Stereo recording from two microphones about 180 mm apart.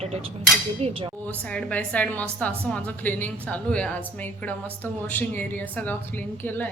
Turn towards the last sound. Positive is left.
turn(degrees=10)  # may be behind; listen again after turning